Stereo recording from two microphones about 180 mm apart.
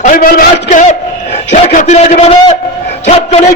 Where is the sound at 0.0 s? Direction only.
50° left (ahead or behind).